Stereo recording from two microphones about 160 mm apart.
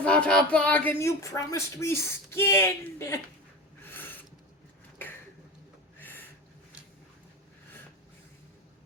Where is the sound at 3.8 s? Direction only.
10° left (ahead or behind).